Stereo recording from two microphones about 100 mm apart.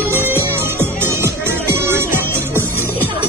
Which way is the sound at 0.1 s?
20° right (ahead or behind).